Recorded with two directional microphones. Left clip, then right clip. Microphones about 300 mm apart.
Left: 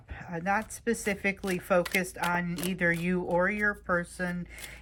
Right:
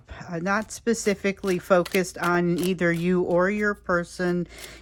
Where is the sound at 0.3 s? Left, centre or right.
Centre.